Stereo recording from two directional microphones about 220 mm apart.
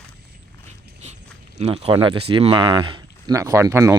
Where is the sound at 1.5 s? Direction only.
25° right (ahead or behind).